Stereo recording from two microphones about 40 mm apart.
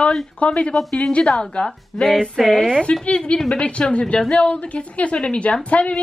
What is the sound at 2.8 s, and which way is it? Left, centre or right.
Speech, left.